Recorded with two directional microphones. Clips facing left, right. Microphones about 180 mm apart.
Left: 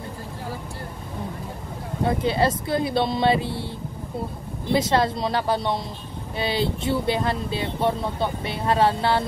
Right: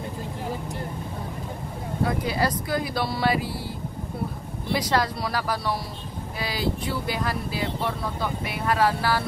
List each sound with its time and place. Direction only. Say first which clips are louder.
2.0 s speech: left 5 dB; 25° left (ahead or behind)
4.7 s speech: left 4 dB; 25° left (ahead or behind)